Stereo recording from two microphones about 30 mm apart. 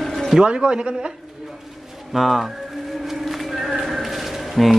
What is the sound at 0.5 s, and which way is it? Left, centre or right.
Speech, right.